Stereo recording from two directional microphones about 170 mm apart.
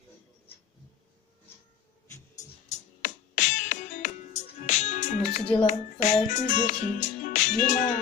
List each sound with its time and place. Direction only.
2.7 s music: 50° left (ahead or behind)